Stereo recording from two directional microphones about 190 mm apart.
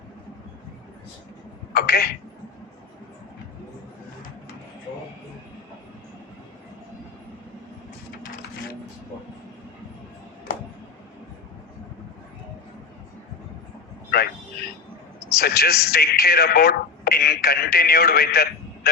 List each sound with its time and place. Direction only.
1.7 s speech: 50° left (ahead or behind)
8.2 s printer: 50° left (ahead or behind)
15.3 s speech: 55° left (ahead or behind)